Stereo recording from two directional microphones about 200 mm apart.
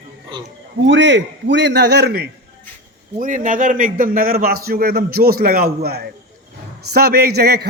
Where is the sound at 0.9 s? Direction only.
65° right (ahead or behind).